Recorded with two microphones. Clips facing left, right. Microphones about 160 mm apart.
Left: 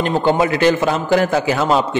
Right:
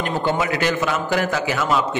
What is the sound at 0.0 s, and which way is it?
Speech, 30° left (ahead or behind).